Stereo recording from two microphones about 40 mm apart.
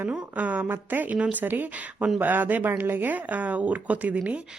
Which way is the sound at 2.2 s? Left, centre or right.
Right.